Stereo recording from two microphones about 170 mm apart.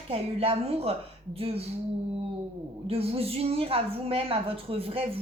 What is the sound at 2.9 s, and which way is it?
A woman's voice, 35° right (ahead or behind).